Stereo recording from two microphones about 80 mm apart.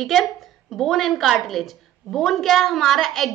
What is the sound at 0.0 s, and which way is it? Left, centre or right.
A woman's voice, centre.